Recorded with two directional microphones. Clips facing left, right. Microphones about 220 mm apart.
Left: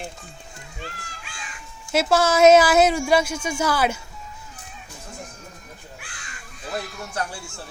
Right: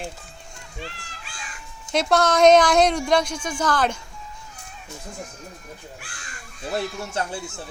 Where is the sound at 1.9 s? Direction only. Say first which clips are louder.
Left 1 dB; 5° left (ahead or behind).